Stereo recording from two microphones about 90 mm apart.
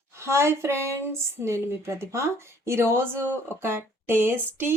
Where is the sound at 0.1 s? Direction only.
30° right (ahead or behind).